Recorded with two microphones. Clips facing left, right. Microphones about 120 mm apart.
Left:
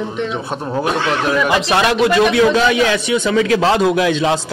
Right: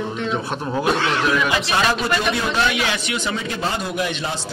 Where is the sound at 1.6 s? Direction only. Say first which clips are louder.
Left 6 dB; 85° left.